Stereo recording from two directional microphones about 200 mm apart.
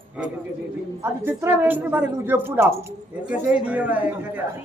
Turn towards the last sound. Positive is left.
turn(degrees=-5)  # may be behind; listen again after turning